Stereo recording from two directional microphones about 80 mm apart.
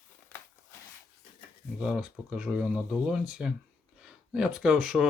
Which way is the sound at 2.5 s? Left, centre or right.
Centre.